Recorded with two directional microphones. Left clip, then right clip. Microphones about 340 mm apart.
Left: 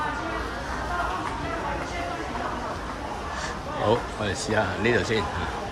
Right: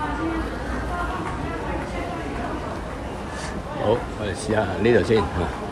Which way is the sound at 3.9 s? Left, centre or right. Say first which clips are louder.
Right 2 dB; centre.